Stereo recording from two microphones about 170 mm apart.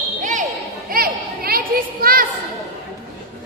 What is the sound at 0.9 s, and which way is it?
Children playing, 60° right (ahead or behind).